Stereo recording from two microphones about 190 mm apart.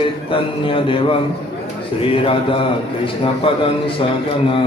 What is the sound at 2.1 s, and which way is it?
A man's voice, 30° left (ahead or behind).